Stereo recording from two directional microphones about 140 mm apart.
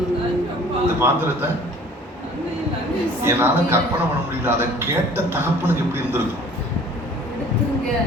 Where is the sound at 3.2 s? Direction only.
15° right (ahead or behind).